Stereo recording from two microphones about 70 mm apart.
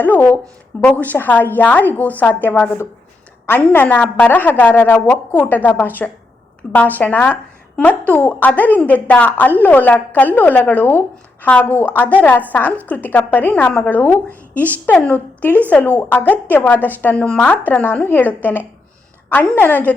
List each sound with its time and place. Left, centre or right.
0.0 s a woman's voice: left
3.7 s a woman's voice: left
17.2 s a woman's voice: centre
19.5 s a woman's voice: left